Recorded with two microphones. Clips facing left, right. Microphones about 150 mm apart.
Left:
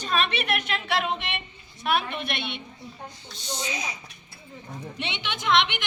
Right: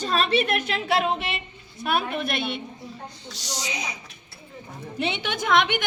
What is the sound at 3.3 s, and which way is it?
Speech, 90° right.